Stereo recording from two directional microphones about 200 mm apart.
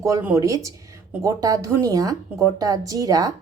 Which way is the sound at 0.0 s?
10° right (ahead or behind).